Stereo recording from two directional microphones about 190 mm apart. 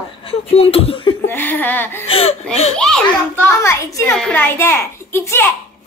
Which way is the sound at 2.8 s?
5° left (ahead or behind).